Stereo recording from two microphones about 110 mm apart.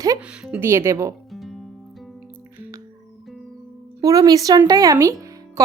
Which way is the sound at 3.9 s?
30° right (ahead or behind).